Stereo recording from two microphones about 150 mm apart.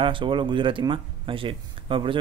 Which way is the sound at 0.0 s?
35° right (ahead or behind).